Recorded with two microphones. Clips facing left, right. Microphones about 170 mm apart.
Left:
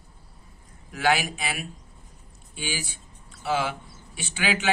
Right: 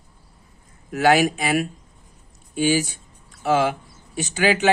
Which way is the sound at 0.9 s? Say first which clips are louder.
Right 7 dB; 45° right (ahead or behind).